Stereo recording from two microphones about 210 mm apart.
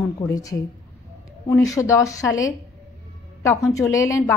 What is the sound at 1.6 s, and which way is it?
Speech, 15° left (ahead or behind).